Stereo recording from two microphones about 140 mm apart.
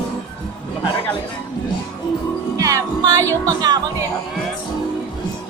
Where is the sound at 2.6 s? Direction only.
25° right (ahead or behind).